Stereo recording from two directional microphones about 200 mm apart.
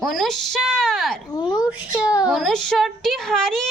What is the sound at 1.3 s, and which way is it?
Speech, 20° left (ahead or behind).